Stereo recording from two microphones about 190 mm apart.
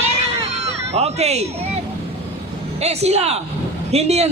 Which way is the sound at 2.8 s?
35° right (ahead or behind).